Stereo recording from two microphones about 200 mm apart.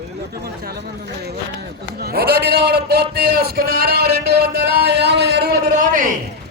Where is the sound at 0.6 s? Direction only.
55° right (ahead or behind).